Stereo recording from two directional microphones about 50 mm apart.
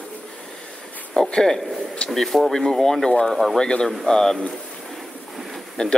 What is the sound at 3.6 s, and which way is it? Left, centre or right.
Speech, centre.